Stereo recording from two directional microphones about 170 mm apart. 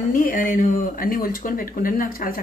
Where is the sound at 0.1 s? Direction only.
55° left (ahead or behind).